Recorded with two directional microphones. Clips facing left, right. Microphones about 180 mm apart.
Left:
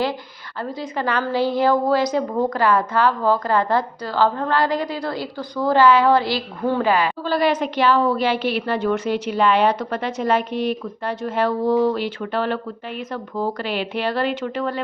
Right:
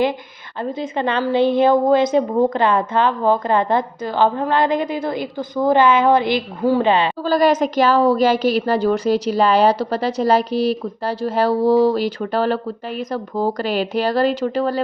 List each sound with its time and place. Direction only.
0.6 s a woman's voice: 20° right (ahead or behind)
6.8 s a woman's voice: 25° right (ahead or behind)
7.2 s a woman's voice: 40° right (ahead or behind)